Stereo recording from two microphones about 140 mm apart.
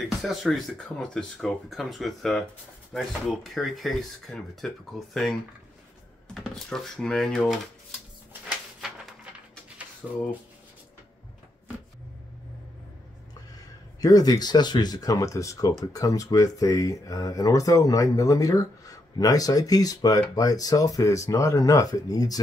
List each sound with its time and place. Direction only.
0.0 s speech: centre (ahead or behind)
14.0 s speech: 25° left (ahead or behind)